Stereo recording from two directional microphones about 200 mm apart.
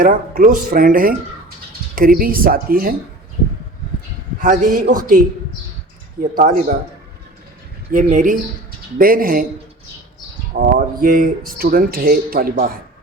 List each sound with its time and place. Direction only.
0.0 s speech: 45° right (ahead or behind)
4.4 s a man's voice: 40° right (ahead or behind)
6.3 s speech: 45° right (ahead or behind)
7.9 s a man's voice: 40° right (ahead or behind)
10.6 s speech: 45° right (ahead or behind)